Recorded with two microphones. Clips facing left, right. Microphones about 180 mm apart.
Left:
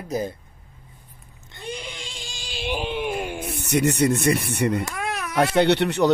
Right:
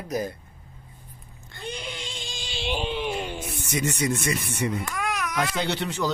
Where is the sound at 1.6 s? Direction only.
Centre (ahead or behind).